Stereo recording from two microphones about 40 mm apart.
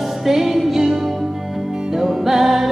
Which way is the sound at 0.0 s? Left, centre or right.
Centre.